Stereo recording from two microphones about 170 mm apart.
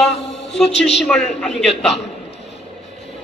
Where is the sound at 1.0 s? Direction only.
5° left (ahead or behind).